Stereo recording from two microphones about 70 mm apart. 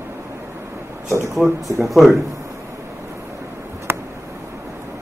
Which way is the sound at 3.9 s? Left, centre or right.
Right.